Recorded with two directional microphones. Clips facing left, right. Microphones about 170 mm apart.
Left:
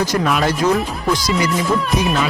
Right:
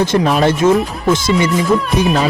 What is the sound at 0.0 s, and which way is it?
Speech, 30° right (ahead or behind).